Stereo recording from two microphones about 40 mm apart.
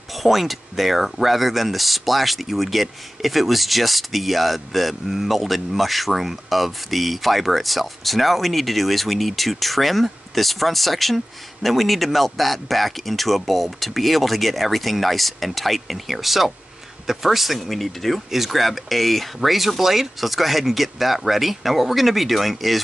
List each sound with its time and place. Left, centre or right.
0.1 s speech: centre